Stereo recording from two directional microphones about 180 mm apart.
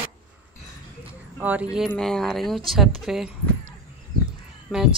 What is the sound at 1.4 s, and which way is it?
A woman's voice, 10° right (ahead or behind).